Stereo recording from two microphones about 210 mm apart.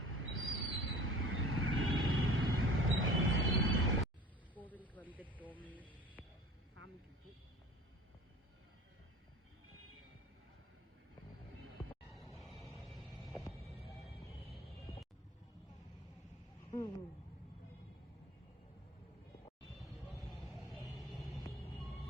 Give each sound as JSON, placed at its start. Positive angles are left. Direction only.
{"t": 0.0, "sound": "vehicle", "side_deg": -70}
{"t": 4.5, "sound": "snake", "side_deg": 5}
{"t": 5.6, "sound": "a sound", "side_deg": 5}
{"t": 12.6, "sound": "music", "side_deg": 0}
{"t": 19.8, "sound": "vehicle", "side_deg": 0}
{"t": 21.4, "sound": "vehicle", "side_deg": 15}